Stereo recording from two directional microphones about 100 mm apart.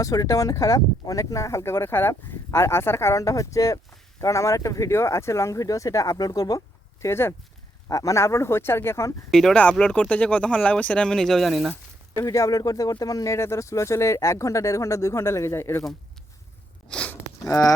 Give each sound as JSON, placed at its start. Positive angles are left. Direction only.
{"t": 0.0, "sound": "speech", "side_deg": 35}
{"t": 7.0, "sound": "speech", "side_deg": 25}
{"t": 9.3, "sound": "speech", "side_deg": 5}
{"t": 12.2, "sound": "speech", "side_deg": 30}
{"t": 16.9, "sound": "a sound", "side_deg": 10}